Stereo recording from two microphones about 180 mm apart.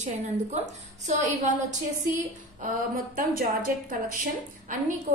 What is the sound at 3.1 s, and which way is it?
Speech, 50° right (ahead or behind).